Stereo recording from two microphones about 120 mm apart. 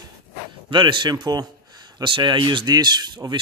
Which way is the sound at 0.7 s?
45° right (ahead or behind).